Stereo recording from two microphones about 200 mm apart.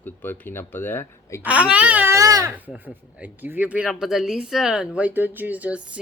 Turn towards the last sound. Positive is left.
turn(degrees=-5)  # may be behind; listen again after turning